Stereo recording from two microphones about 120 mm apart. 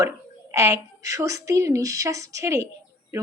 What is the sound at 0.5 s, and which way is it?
A woman's voice, 25° right (ahead or behind).